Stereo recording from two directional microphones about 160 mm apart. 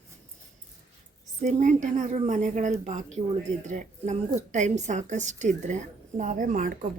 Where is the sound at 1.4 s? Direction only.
45° right (ahead or behind).